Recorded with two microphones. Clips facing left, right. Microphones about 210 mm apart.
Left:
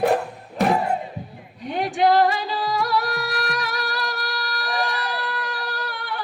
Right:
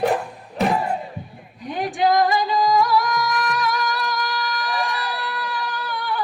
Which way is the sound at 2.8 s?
65° left (ahead or behind).